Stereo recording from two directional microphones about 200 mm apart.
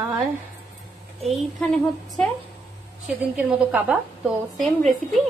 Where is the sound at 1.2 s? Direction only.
Centre (ahead or behind).